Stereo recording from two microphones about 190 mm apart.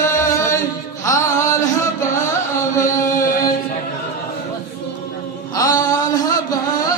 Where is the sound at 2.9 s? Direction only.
15° left (ahead or behind).